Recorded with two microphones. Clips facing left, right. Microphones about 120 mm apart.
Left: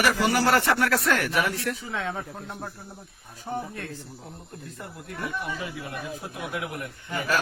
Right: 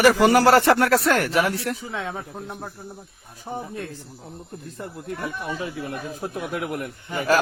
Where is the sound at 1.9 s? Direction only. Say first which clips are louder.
Right 1 dB; 10° right (ahead or behind).